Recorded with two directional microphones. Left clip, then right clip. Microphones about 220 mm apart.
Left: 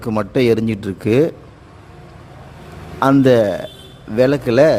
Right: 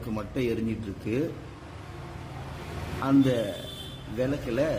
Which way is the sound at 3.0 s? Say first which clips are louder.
Left 13 dB; 45° left (ahead or behind).